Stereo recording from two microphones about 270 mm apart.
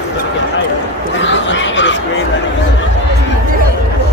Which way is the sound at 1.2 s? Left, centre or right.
Left.